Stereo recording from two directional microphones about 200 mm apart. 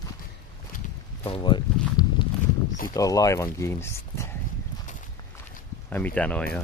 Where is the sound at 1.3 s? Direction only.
25° left (ahead or behind).